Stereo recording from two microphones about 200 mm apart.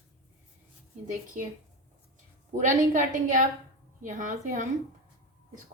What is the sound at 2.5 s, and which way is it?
A woman's voice, 40° right (ahead or behind).